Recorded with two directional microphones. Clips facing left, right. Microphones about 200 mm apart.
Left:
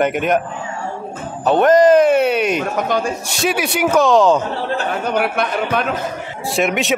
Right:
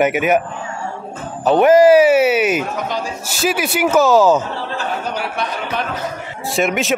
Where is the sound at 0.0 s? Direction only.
5° right (ahead or behind).